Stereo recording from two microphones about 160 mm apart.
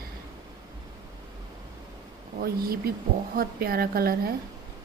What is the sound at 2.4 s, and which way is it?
A woman's voice, 70° right (ahead or behind).